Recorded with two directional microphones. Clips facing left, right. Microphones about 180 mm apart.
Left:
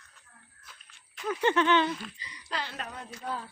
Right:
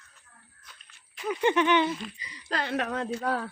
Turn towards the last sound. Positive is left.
turn(degrees=-75)  # may be behind; listen again after turning